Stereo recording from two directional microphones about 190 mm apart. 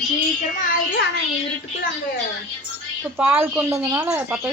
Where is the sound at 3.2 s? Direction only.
10° right (ahead or behind).